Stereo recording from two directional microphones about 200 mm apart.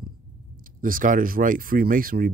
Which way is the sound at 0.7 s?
45° right (ahead or behind).